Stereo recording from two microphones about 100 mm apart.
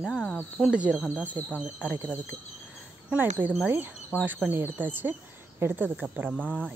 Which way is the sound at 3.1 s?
20° right (ahead or behind).